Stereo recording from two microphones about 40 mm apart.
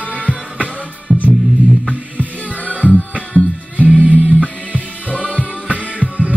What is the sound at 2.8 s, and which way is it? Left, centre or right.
Music, left.